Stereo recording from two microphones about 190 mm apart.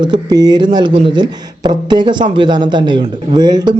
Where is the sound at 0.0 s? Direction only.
20° right (ahead or behind).